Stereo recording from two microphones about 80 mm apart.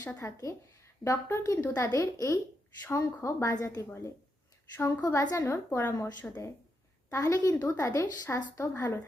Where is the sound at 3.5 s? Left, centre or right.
Left.